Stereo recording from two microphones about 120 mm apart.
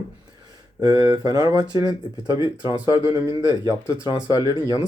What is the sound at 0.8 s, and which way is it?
Speech, 35° right (ahead or behind).